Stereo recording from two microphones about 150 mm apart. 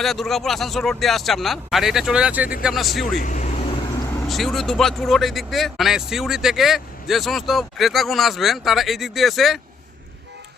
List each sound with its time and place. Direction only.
0.0 s speech: centre (ahead or behind)
3.2 s speech: 60° left (ahead or behind)
4.3 s speech: centre (ahead or behind)